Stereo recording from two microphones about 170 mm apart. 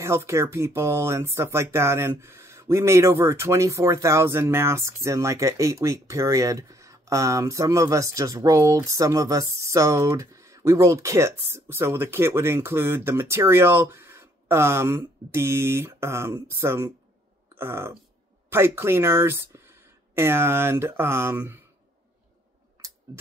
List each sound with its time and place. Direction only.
0.0 s speech: 15° right (ahead or behind)